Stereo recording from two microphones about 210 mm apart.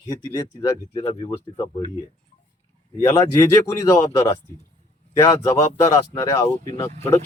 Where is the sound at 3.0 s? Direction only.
15° left (ahead or behind).